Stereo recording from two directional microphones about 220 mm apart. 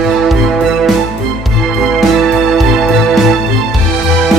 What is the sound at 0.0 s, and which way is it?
Music, centre (ahead or behind).